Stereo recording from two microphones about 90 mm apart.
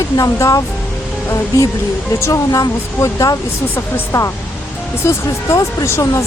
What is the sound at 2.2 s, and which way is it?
Speech, 35° left (ahead or behind).